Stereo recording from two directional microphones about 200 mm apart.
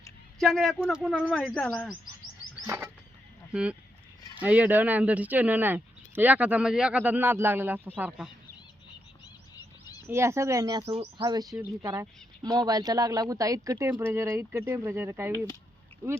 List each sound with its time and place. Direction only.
0.3 s speech: centre (ahead or behind)
2.6 s speech: 15° right (ahead or behind)
9.6 s bird: 20° left (ahead or behind)
10.1 s speech: 15° right (ahead or behind)